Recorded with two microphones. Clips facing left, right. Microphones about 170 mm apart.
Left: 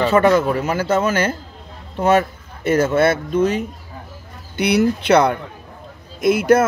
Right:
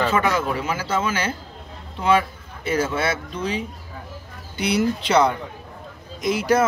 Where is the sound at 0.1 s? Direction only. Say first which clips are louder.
Left 7 dB; 45° left (ahead or behind).